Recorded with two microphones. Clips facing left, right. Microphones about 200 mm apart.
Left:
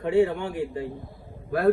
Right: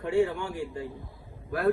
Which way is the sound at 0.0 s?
20° left (ahead or behind).